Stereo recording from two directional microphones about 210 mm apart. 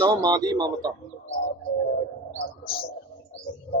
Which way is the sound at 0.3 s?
20° right (ahead or behind).